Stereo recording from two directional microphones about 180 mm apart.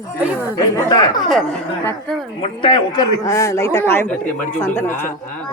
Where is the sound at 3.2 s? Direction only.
15° left (ahead or behind).